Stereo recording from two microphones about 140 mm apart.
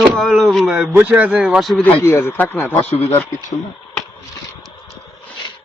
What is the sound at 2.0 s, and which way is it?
Speech, 20° left (ahead or behind).